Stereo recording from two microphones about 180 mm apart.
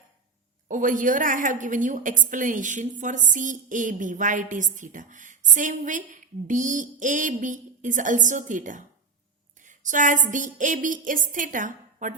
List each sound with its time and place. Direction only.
0.7 s a woman's voice: 45° right (ahead or behind)